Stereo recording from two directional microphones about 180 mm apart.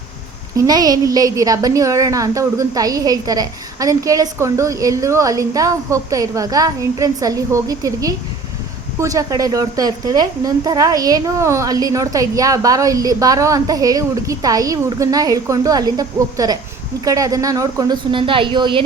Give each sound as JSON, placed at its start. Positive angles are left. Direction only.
{"t": 0.5, "sound": "a woman's voice", "side_deg": -20}